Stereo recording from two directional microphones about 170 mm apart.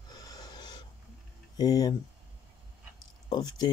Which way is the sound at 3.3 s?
25° left (ahead or behind).